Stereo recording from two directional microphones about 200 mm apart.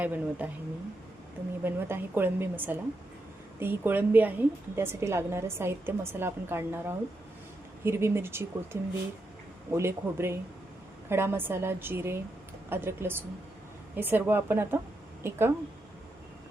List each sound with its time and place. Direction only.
0.0 s a woman's voice: 5° right (ahead or behind)
1.6 s a woman's voice: 10° right (ahead or behind)